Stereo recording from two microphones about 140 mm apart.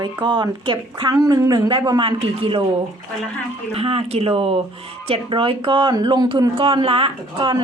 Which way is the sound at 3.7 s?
45° right (ahead or behind).